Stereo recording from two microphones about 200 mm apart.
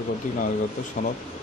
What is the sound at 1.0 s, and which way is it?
Speech, 45° left (ahead or behind).